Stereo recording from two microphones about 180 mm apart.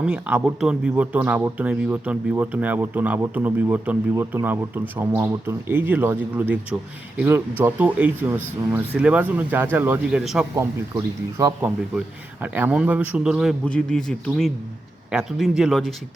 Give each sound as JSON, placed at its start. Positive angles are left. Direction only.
{"t": 0.0, "sound": "a man's voice", "side_deg": -10}
{"t": 10.5, "sound": "a man's voice", "side_deg": -15}